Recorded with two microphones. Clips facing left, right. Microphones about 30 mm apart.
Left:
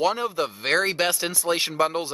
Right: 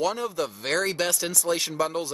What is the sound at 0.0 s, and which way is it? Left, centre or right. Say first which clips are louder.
Speech: left 3 dB; left.